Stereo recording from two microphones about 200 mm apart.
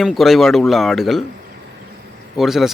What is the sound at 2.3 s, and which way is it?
Speech, centre (ahead or behind).